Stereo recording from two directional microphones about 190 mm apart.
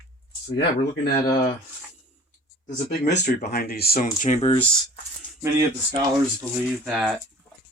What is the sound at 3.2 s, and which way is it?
Speech, 55° left (ahead or behind).